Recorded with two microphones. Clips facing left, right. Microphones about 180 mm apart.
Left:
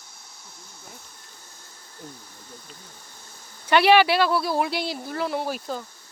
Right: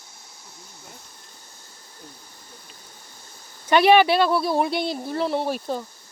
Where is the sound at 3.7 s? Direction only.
20° right (ahead or behind).